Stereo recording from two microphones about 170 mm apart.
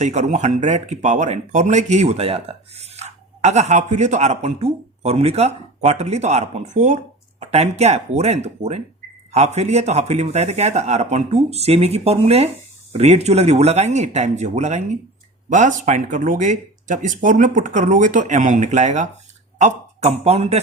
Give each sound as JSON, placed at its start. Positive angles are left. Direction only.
{"t": 0.0, "sound": "a man's voice", "side_deg": -45}